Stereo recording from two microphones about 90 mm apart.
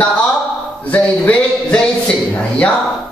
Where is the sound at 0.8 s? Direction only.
15° left (ahead or behind).